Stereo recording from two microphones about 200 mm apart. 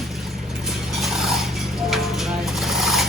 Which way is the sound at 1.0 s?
Centre (ahead or behind).